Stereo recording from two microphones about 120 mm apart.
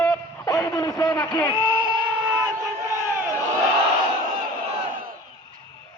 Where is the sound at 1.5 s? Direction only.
40° right (ahead or behind).